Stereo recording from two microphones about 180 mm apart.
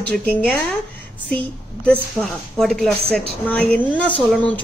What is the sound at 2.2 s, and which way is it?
A woman's voice, centre (ahead or behind).